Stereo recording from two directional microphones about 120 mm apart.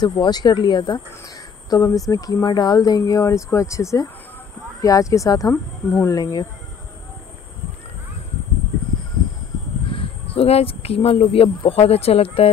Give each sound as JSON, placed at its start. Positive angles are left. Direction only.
{"t": 0.0, "sound": "speech", "side_deg": 35}
{"t": 6.1, "sound": "speech", "side_deg": 30}
{"t": 9.9, "sound": "speech", "side_deg": 55}